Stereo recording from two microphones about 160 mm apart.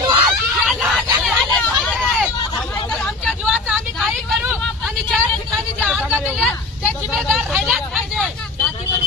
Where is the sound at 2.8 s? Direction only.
5° left (ahead or behind).